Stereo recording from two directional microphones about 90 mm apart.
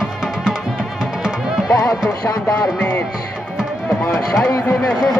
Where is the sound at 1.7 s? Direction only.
40° left (ahead or behind).